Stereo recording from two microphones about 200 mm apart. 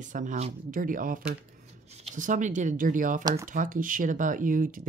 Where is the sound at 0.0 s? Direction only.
40° right (ahead or behind).